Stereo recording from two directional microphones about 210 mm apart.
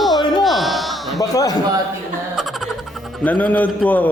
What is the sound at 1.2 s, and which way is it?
Speech, 15° left (ahead or behind).